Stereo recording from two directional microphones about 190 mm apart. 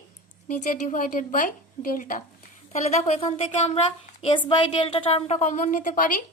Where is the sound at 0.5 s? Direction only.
40° left (ahead or behind).